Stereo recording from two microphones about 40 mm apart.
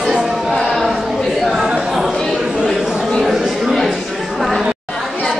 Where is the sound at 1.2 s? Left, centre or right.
Centre.